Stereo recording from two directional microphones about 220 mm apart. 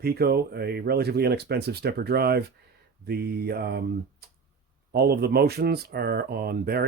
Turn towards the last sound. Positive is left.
turn(degrees=-45)  # may be behind; listen again after turning